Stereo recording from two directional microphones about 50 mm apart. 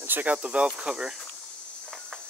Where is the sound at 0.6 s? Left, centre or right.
Centre.